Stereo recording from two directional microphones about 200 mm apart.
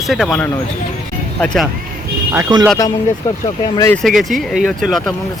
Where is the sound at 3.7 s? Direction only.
10° left (ahead or behind).